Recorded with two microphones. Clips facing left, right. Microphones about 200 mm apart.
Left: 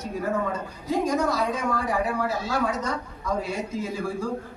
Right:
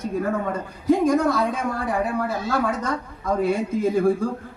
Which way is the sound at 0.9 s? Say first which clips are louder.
Right 6 dB; 55° right (ahead or behind).